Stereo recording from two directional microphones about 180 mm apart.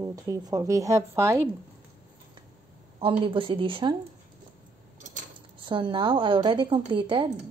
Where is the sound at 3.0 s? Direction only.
30° right (ahead or behind).